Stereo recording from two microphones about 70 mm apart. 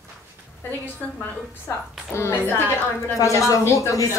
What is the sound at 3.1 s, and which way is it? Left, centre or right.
A woman's voice, left.